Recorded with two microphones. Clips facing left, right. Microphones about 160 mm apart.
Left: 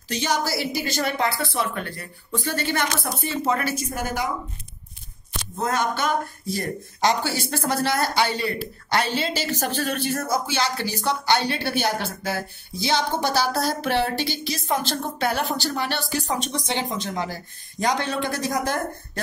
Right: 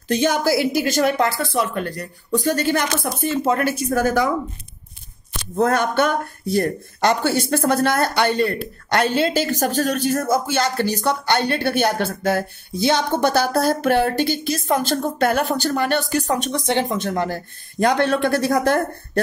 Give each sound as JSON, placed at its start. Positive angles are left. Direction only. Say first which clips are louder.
{"t": 0.1, "sound": "a woman's voice", "louder": "right 7 dB", "side_deg": -50}
{"t": 5.6, "sound": "speech", "louder": "right 7 dB", "side_deg": -60}